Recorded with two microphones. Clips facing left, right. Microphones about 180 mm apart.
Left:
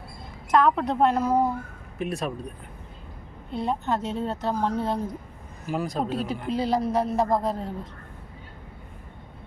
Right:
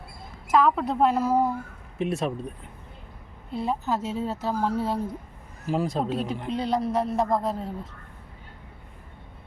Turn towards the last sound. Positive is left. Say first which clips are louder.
# left 1 dB
turn(degrees=0)  # may be behind; listen again after turning